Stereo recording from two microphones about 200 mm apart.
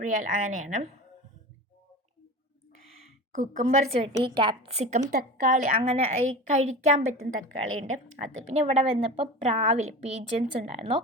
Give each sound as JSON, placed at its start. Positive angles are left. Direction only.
{"t": 0.0, "sound": "a woman's voice", "side_deg": -40}
{"t": 3.3, "sound": "a woman's voice", "side_deg": -35}
{"t": 4.2, "sound": "a woman's voice", "side_deg": -25}